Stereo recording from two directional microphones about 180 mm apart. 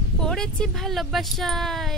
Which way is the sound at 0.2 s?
5° left (ahead or behind).